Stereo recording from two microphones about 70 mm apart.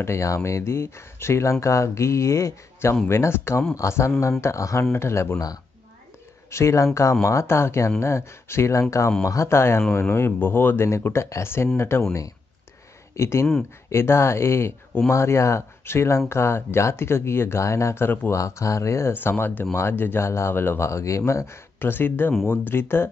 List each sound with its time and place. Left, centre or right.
0.0 s speech: left
6.5 s speech: left
10.9 s speech: left
18.3 s speech: left
19.1 s speech: left
21.7 s speech: left